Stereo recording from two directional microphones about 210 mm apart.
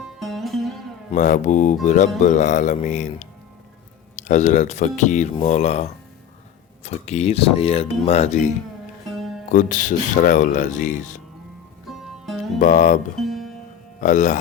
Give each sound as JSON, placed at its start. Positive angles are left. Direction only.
{"t": 0.2, "sound": "music", "side_deg": 0}
{"t": 1.1, "sound": "speech", "side_deg": 35}
{"t": 9.1, "sound": "music", "side_deg": 0}
{"t": 9.5, "sound": "speech", "side_deg": 35}
{"t": 11.9, "sound": "music", "side_deg": 0}
{"t": 12.5, "sound": "speech", "side_deg": 35}
{"t": 13.1, "sound": "music", "side_deg": 0}
{"t": 14.0, "sound": "speech", "side_deg": 35}